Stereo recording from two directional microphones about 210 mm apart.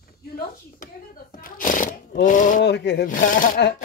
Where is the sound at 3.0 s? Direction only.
40° left (ahead or behind).